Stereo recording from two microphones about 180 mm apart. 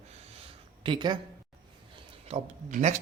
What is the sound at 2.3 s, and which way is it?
Speech, 40° right (ahead or behind).